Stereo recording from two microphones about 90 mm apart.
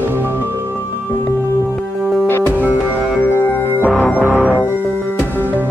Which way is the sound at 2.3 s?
25° left (ahead or behind).